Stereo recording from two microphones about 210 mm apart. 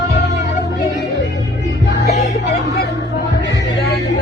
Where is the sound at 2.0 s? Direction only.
35° left (ahead or behind).